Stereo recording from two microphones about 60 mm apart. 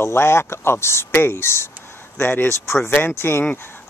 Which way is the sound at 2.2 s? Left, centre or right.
Left.